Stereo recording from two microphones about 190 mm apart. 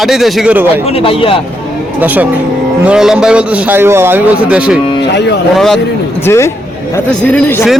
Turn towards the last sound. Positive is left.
turn(degrees=10)  # may be behind; listen again after turning